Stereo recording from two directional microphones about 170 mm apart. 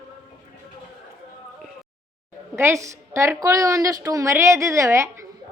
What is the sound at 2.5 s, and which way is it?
A woman's voice, 15° right (ahead or behind).